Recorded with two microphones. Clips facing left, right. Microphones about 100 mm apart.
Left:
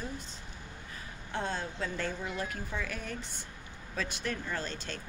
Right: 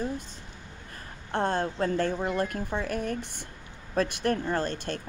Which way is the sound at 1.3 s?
60° right (ahead or behind).